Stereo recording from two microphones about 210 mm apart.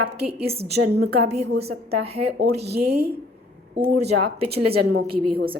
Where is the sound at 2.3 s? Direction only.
50° right (ahead or behind).